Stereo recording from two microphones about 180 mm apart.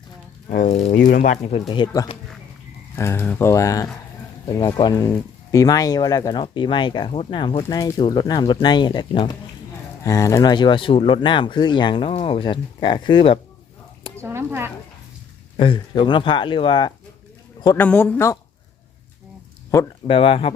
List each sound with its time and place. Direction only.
0.5 s speech: 40° left (ahead or behind)
1.7 s speech: 25° left (ahead or behind)
14.2 s speech: 15° right (ahead or behind)
15.5 s speech: 30° left (ahead or behind)
17.7 s speech: 10° left (ahead or behind)
20.1 s speech: 30° left (ahead or behind)